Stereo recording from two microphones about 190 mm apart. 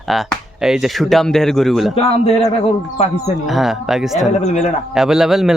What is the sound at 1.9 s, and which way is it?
Speech, 30° left (ahead or behind).